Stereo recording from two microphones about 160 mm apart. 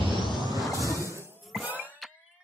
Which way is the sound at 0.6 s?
20° left (ahead or behind).